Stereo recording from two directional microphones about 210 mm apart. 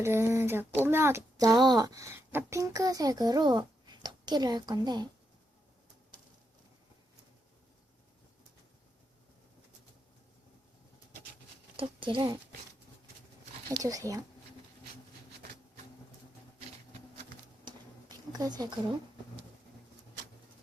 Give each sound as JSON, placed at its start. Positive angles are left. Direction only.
{"t": 0.0, "sound": "a child's voice", "side_deg": -10}
{"t": 11.8, "sound": "speech", "side_deg": -25}
{"t": 13.8, "sound": "a child's voice", "side_deg": -15}
{"t": 17.7, "sound": "a sound", "side_deg": -20}